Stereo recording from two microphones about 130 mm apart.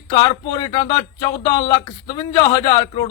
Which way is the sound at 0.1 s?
35° left (ahead or behind).